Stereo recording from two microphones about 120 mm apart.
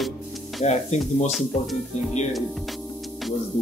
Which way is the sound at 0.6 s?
70° left (ahead or behind).